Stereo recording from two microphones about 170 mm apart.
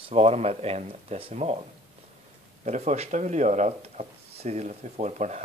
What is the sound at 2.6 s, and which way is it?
Speech, 40° right (ahead or behind).